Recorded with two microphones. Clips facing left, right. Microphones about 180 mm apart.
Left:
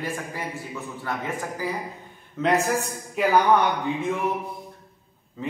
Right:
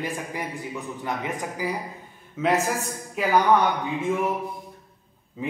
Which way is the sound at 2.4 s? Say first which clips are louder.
Left 1 dB; 5° right (ahead or behind).